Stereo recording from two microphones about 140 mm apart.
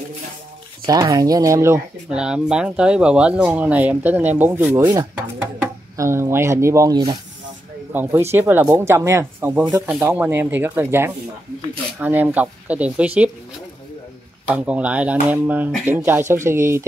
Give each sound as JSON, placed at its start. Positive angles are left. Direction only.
{"t": 0.8, "sound": "speech", "side_deg": -25}
{"t": 2.0, "sound": "speech", "side_deg": -5}
{"t": 14.5, "sound": "speech", "side_deg": -10}